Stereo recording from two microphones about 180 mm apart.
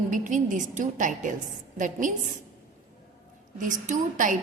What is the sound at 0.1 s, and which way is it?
A woman's voice, 45° right (ahead or behind).